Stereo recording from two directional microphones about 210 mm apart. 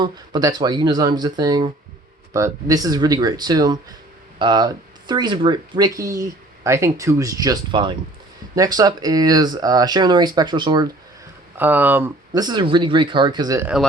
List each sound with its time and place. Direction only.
0.0 s speech: 20° right (ahead or behind)
11.5 s speech: 10° right (ahead or behind)